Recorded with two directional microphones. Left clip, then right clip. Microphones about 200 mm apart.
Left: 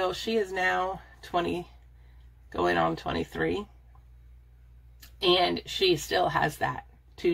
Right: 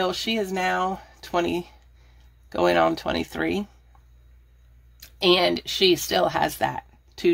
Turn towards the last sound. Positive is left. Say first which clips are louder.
# right 5 dB
turn(degrees=-50)  # may be behind; listen again after turning